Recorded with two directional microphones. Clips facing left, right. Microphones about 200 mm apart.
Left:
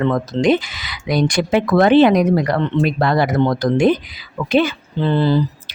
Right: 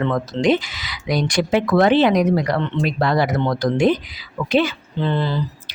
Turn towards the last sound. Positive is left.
turn(degrees=35)  # may be behind; listen again after turning